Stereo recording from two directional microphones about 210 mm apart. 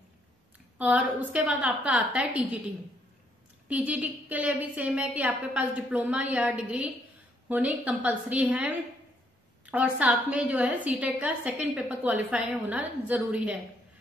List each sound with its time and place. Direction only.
0.7 s a woman's voice: 5° right (ahead or behind)
3.6 s a woman's voice: 5° right (ahead or behind)